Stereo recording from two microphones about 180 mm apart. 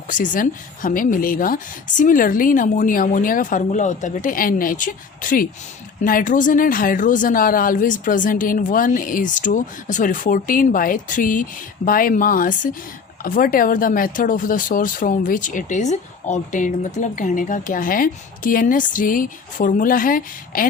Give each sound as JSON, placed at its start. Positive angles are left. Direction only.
{"t": 0.1, "sound": "speech", "side_deg": 50}